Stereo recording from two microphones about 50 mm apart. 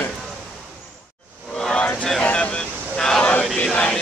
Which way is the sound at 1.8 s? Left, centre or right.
Left.